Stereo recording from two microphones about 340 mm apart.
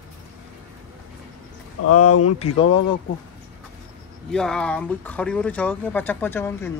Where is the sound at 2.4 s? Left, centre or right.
Centre.